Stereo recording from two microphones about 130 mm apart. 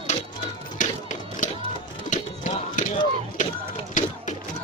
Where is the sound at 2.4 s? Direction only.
90° left.